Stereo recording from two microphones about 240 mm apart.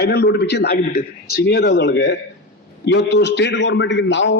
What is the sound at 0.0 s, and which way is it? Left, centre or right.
A man's voice, left.